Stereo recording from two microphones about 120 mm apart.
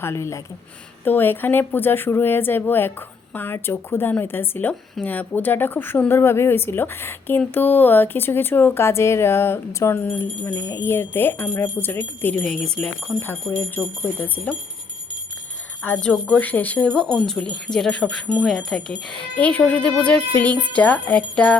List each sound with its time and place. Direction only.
0.0 s speech: 25° left (ahead or behind)
12.4 s speech: 5° left (ahead or behind)
15.8 s speech: 10° left (ahead or behind)